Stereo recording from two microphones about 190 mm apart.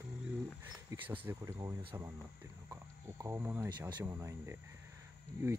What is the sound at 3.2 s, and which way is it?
Speech, 10° right (ahead or behind).